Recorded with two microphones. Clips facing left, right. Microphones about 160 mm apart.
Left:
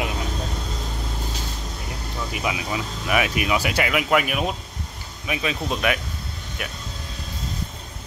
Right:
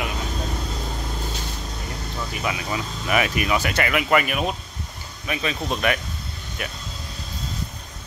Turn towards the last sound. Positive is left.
turn(degrees=5)  # may be behind; listen again after turning